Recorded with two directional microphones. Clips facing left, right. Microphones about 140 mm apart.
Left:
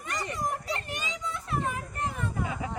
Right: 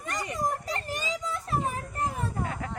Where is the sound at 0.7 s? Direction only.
35° right (ahead or behind).